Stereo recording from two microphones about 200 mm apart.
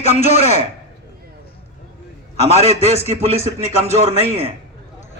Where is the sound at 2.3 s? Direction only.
35° left (ahead or behind).